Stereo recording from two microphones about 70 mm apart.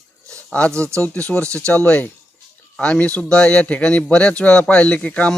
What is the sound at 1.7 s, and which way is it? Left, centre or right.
A man's voice, centre.